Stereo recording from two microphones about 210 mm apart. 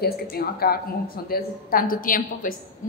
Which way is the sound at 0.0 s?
45° left (ahead or behind).